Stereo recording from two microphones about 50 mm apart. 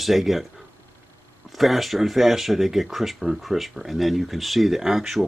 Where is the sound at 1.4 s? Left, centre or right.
Centre.